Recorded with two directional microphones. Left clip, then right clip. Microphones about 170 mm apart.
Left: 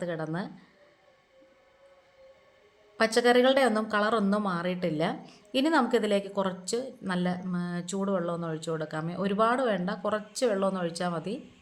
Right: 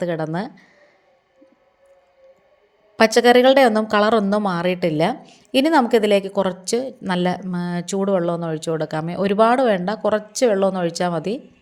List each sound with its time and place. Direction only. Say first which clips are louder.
0.0 s speech: right 10 dB; 40° right (ahead or behind)
3.0 s speech: right 10 dB; 40° right (ahead or behind)